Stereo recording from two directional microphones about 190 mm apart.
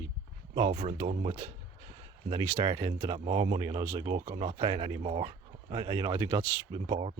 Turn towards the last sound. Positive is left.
turn(degrees=-30)  # may be behind; listen again after turning